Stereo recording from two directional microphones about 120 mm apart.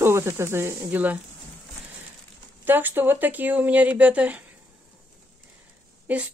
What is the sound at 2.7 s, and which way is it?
Speech, 15° right (ahead or behind).